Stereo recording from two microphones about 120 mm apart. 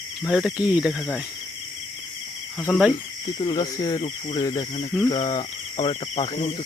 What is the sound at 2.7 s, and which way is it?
Cricket, 5° right (ahead or behind).